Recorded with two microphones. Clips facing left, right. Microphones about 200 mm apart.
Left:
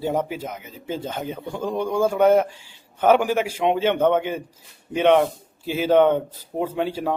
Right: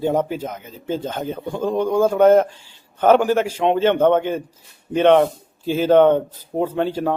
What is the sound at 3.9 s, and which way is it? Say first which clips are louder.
A man's voice: right 5 dB; 50° right (ahead or behind).